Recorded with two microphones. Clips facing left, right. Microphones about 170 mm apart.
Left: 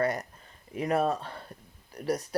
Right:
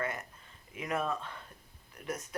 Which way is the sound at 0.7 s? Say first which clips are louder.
Left 7 dB; 35° left (ahead or behind).